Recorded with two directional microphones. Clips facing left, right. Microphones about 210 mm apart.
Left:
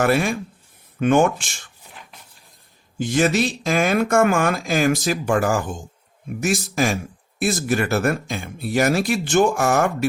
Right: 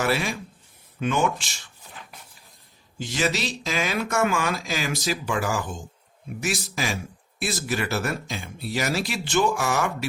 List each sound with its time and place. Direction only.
0.0 s speech: 50° left (ahead or behind)
3.0 s speech: 50° left (ahead or behind)